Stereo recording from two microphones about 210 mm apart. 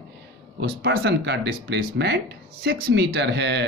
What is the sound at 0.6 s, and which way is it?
Speech, 55° right (ahead or behind).